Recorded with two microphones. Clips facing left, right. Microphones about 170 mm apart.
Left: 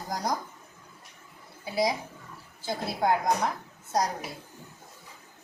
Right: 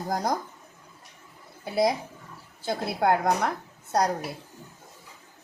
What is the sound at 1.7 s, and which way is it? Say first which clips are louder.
A woman's voice: right 3 dB; 55° right (ahead or behind).